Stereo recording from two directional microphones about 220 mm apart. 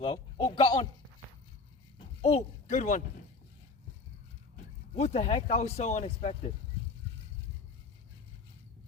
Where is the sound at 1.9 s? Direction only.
30° left (ahead or behind).